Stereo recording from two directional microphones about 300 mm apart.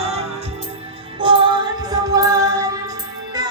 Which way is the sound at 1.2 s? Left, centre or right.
Centre.